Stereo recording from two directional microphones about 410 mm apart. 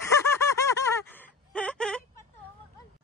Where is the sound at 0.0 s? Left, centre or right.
Centre.